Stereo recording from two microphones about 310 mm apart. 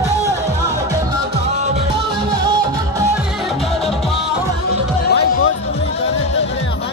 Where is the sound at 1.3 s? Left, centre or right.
Right.